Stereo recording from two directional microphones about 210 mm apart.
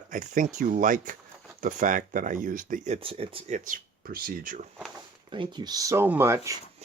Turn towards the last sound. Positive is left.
turn(degrees=-15)  # may be behind; listen again after turning